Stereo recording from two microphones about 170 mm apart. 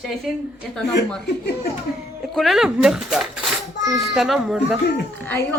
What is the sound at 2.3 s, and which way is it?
A woman's voice, centre (ahead or behind).